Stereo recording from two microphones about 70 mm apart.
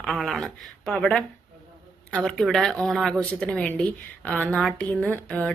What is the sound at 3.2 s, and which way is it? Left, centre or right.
A woman's voice, centre.